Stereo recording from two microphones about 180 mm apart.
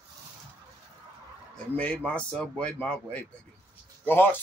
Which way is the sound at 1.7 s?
5° left (ahead or behind).